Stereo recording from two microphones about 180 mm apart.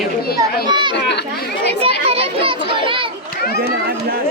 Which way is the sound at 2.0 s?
30° right (ahead or behind).